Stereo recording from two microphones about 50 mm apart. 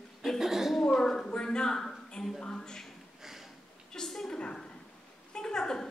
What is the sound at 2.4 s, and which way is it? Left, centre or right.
Speech, centre.